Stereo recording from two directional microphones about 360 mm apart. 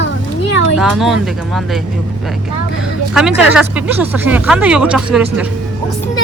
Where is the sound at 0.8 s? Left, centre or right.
Centre.